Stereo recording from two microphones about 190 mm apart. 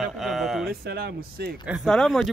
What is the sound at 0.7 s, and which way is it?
Speech, 55° right (ahead or behind).